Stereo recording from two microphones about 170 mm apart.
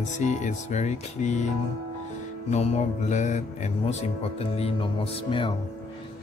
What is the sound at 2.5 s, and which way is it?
Speech, 40° left (ahead or behind).